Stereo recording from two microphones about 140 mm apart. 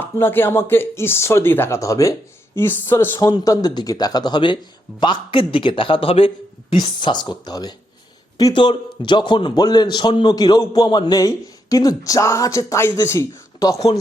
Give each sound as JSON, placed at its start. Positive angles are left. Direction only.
{"t": 0.0, "sound": "a man's voice", "side_deg": 15}